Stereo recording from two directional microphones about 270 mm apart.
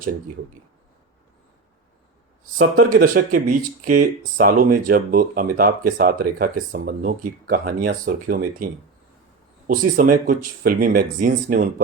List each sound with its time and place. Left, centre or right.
2.7 s speech: right